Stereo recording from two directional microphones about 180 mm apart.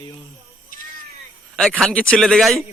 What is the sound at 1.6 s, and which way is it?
Speech, centre (ahead or behind).